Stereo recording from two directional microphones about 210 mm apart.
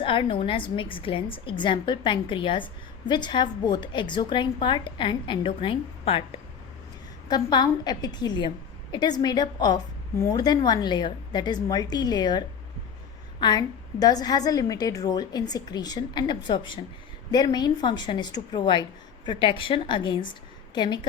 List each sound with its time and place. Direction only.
0.0 s a woman's voice: 25° left (ahead or behind)
7.3 s a woman's voice: 20° left (ahead or behind)